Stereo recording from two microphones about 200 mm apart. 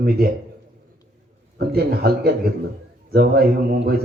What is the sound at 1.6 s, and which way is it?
A man's voice, 50° right (ahead or behind).